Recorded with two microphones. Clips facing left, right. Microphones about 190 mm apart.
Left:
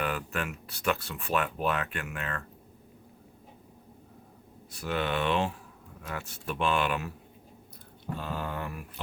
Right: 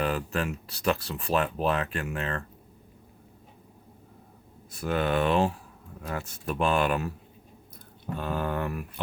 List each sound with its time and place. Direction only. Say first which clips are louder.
0.0 s speech: right 4 dB; 30° right (ahead or behind)
4.8 s speech: right 4 dB; 45° right (ahead or behind)
8.2 s a sound: right 6 dB; 55° right (ahead or behind)